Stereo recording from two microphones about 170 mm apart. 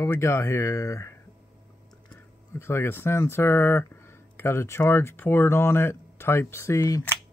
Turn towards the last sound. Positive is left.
turn(degrees=15)  # may be behind; listen again after turning